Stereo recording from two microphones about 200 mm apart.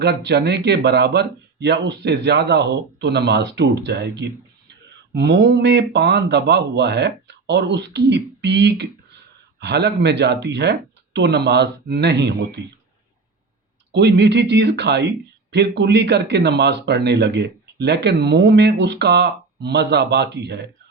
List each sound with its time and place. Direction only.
0.0 s speech: 55° right (ahead or behind)
13.9 s speech: 60° right (ahead or behind)